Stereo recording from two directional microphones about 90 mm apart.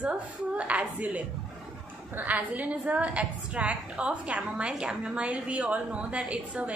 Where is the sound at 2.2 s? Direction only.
15° right (ahead or behind).